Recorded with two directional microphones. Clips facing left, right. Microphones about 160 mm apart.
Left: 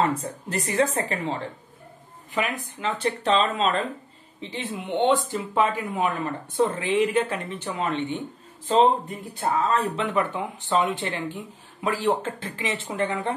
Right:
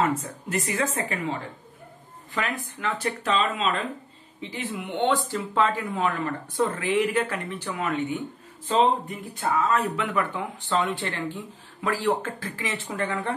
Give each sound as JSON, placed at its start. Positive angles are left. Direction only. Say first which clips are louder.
{"t": 0.0, "sound": "speech", "louder": "left 1 dB", "side_deg": 30}
{"t": 2.3, "sound": "speech", "louder": "left 2 dB", "side_deg": 20}
{"t": 4.4, "sound": "speech", "louder": "even", "side_deg": 30}
{"t": 9.3, "sound": "speech", "louder": "left 1 dB", "side_deg": 35}